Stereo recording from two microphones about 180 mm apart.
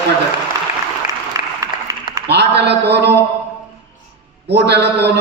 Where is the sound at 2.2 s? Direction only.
70° right (ahead or behind).